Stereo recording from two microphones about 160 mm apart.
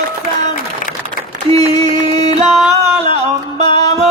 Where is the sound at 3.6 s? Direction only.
30° left (ahead or behind).